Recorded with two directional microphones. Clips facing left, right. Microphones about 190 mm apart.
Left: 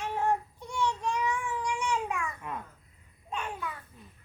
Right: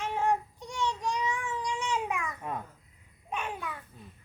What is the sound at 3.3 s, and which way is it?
Babbling, 15° right (ahead or behind).